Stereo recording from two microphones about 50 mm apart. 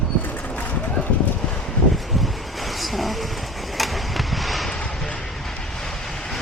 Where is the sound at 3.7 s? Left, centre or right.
Centre.